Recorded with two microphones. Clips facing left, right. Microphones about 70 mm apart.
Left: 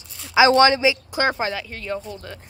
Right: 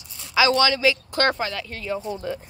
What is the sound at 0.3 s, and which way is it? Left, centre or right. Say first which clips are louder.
Speech: left 5 dB; left.